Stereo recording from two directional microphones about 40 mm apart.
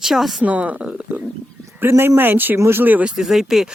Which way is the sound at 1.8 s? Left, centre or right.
Right.